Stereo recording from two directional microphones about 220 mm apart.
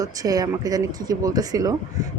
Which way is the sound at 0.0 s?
15° right (ahead or behind).